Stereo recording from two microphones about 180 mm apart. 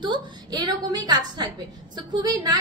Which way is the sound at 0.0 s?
25° right (ahead or behind).